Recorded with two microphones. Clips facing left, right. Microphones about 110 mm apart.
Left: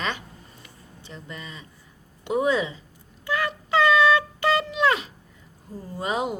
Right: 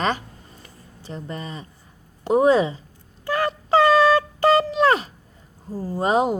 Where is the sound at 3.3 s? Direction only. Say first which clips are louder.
Right 5 dB; 40° right (ahead or behind).